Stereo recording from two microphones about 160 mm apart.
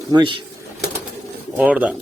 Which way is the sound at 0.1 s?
30° right (ahead or behind).